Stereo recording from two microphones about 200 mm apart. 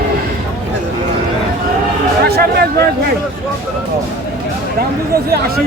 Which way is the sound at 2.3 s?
55° right (ahead or behind).